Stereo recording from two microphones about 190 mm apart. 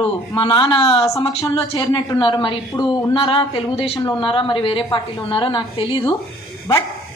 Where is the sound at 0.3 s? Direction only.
25° left (ahead or behind).